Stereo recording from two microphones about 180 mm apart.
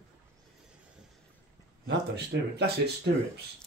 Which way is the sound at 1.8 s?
70° right (ahead or behind).